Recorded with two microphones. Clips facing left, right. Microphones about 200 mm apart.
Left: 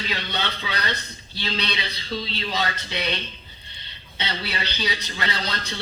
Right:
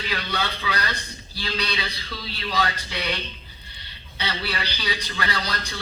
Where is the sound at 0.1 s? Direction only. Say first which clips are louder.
Right 4 dB; 25° left (ahead or behind).